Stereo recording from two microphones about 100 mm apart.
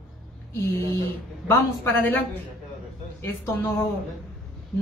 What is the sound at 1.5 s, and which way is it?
Speech, 20° left (ahead or behind).